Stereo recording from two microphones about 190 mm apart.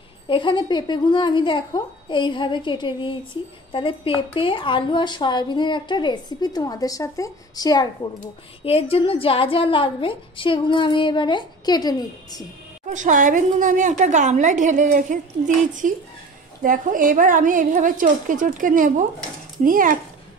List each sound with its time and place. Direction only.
0.3 s a woman's voice: 25° left (ahead or behind)
8.6 s a woman's voice: 30° left (ahead or behind)
12.9 s a woman's voice: 40° right (ahead or behind)